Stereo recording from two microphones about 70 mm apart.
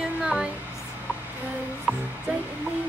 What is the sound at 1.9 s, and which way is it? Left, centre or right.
Speech, centre.